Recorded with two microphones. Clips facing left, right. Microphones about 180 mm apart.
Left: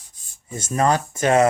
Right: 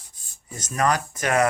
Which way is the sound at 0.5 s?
25° left (ahead or behind).